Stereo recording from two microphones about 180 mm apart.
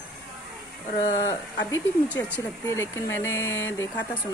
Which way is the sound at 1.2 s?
10° left (ahead or behind).